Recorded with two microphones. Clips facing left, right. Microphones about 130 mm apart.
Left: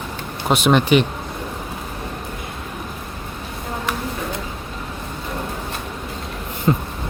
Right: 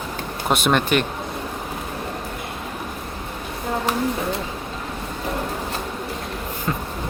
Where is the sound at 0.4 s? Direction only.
Centre (ahead or behind).